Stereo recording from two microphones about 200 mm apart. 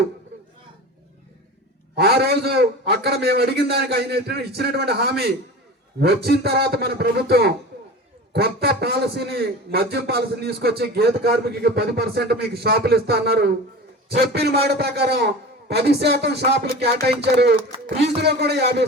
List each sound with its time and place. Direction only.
2.0 s a man's voice: 55° right (ahead or behind)